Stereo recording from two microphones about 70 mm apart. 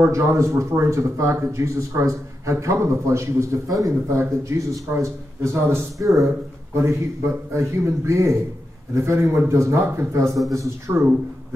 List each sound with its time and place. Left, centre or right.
0.1 s speech: right
4.1 s speech: right